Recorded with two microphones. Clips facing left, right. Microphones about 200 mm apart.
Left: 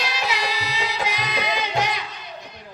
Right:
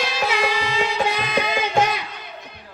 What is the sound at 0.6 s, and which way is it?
Carnatic music, 50° right (ahead or behind).